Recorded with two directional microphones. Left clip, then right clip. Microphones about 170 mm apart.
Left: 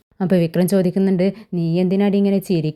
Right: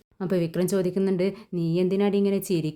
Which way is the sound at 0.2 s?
30° left (ahead or behind).